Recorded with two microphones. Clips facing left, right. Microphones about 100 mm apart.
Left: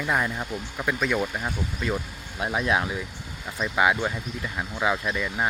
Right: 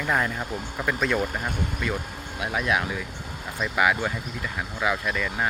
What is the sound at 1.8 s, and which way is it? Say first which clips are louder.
Speech: left 1 dB; 30° left (ahead or behind).